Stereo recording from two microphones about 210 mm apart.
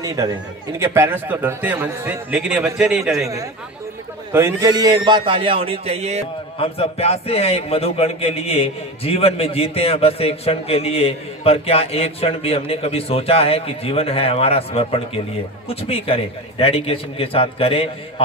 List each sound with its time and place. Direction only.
0.0 s a man's voice: 15° right (ahead or behind)
4.3 s a man's voice: 10° right (ahead or behind); by 6.2 s 30° right (ahead or behind)
6.6 s a man's voice: 30° left (ahead or behind)